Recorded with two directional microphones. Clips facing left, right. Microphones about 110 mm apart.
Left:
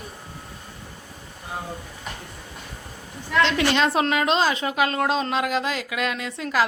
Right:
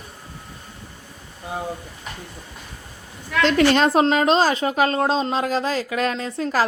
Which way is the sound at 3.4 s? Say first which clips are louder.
Right 6 dB; 45° right (ahead or behind).